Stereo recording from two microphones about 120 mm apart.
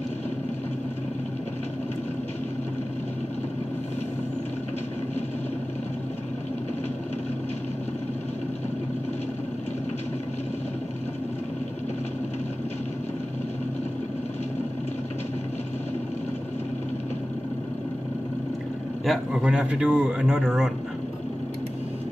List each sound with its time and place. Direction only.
19.0 s speech: 5° right (ahead or behind)